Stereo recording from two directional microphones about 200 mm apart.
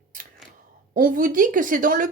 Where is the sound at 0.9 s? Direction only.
45° right (ahead or behind).